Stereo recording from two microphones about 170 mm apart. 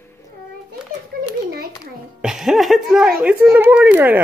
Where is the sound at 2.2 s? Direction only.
5° right (ahead or behind).